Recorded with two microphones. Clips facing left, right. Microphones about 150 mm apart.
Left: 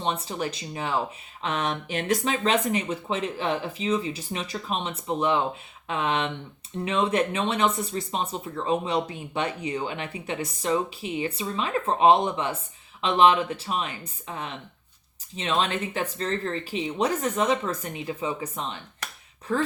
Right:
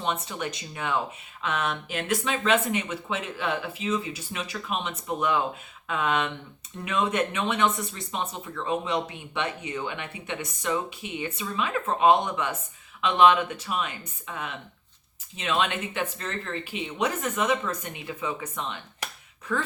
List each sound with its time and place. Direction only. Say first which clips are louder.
0.0 s speech: left 2 dB; 30° left (ahead or behind)